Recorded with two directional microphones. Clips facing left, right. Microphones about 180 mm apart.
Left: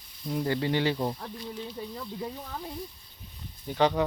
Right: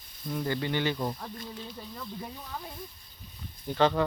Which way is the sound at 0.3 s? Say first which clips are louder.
Left 3 dB; 30° left (ahead or behind).